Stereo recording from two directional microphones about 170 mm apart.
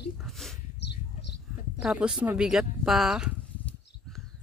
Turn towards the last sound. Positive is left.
turn(degrees=-5)  # may be behind; listen again after turning